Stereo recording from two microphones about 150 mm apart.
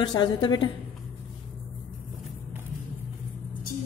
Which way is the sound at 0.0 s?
25° left (ahead or behind).